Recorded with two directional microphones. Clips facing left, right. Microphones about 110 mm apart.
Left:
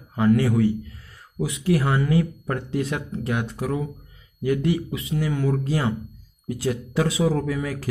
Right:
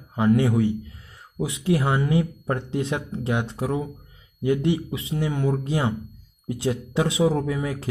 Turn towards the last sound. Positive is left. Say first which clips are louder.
# even
turn(degrees=-25)  # may be behind; listen again after turning